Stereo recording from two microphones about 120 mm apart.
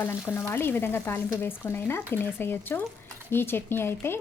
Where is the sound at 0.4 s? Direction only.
20° left (ahead or behind).